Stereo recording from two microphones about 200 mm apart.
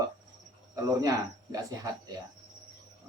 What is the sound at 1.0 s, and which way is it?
Speech, 20° right (ahead or behind).